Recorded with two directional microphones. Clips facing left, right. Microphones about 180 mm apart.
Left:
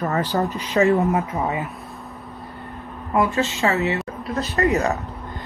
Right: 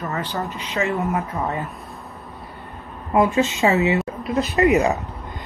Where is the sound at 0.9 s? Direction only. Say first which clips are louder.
Left 3 dB; 20° left (ahead or behind).